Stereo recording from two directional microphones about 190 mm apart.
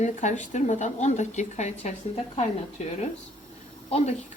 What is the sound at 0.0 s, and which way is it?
Speech, 40° left (ahead or behind).